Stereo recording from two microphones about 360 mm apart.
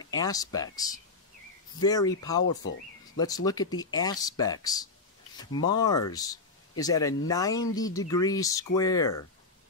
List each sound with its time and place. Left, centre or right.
0.2 s speech: centre
2.4 s speech: left
3.2 s speech: centre